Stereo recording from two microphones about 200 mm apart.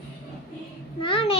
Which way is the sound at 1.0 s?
25° left (ahead or behind).